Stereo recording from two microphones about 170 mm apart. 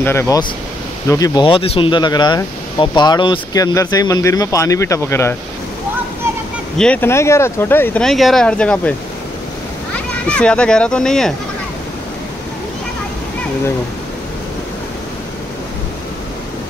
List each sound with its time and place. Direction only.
0.0 s speech: 15° left (ahead or behind)
6.8 s speech: 10° left (ahead or behind)
9.9 s a child's voice: 5° left (ahead or behind)